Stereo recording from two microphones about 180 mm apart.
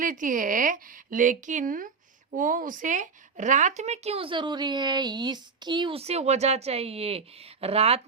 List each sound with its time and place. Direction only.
0.0 s speech: 45° right (ahead or behind)